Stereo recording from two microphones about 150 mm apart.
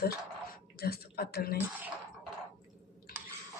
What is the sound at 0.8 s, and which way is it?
Speech, 90° left.